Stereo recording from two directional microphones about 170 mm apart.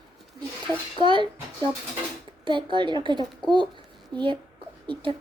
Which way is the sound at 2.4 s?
30° right (ahead or behind).